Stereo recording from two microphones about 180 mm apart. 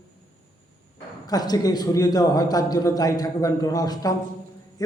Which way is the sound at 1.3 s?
20° left (ahead or behind).